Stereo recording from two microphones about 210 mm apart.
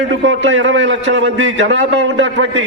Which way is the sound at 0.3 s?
60° right (ahead or behind).